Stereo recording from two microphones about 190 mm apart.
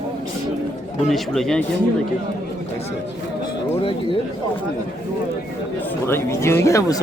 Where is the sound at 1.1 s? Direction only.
Centre (ahead or behind).